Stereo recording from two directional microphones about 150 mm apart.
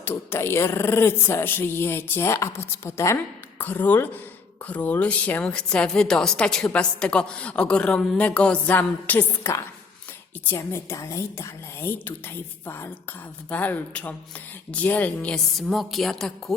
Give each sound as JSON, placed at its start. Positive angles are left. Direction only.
{"t": 0.0, "sound": "a woman's voice", "side_deg": 15}